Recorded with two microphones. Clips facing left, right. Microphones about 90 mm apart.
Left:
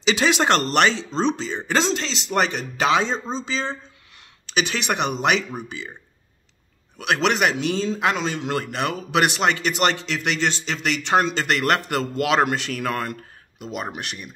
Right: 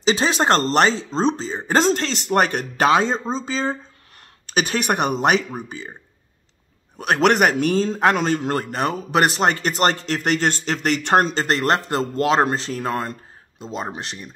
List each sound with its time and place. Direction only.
0.0 s a man's voice: 35° right (ahead or behind)
7.0 s a man's voice: 45° right (ahead or behind); by 14.3 s 30° right (ahead or behind)